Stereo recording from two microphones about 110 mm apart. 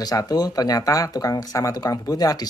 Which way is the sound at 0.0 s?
35° left (ahead or behind).